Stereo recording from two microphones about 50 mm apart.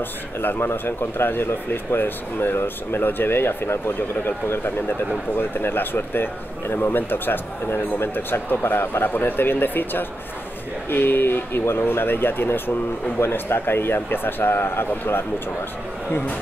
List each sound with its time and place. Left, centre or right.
0.4 s speech: left